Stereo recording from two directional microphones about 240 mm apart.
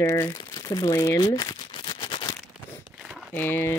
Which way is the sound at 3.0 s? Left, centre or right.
Centre.